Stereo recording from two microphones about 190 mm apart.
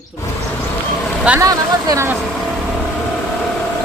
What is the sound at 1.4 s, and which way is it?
Speech, 20° right (ahead or behind).